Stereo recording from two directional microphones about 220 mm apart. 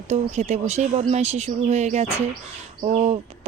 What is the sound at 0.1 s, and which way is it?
Speech, 30° right (ahead or behind).